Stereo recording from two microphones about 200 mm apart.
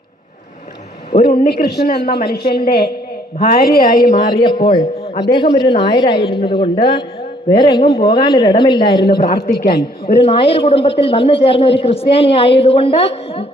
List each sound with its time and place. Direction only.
1.2 s a woman's voice: 50° left (ahead or behind)
3.3 s a woman's voice: 30° left (ahead or behind)
3.6 s a woman's voice: 50° left (ahead or behind)
4.4 s a woman's voice: 25° left (ahead or behind)
9.0 s a woman's voice: 45° left (ahead or behind)
10.2 s a woman's voice: 30° left (ahead or behind)